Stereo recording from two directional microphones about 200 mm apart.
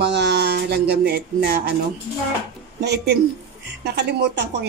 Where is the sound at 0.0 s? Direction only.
55° right (ahead or behind).